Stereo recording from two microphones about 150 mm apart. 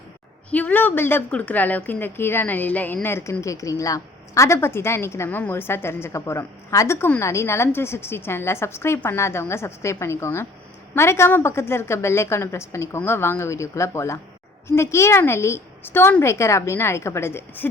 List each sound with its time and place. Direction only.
0.5 s a woman's voice: 10° left (ahead or behind)